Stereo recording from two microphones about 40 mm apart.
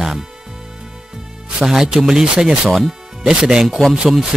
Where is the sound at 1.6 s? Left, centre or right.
Centre.